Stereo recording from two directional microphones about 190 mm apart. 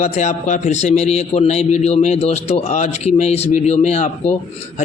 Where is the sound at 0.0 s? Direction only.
35° left (ahead or behind).